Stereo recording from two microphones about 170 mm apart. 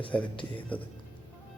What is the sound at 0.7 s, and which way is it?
Speech, 10° left (ahead or behind).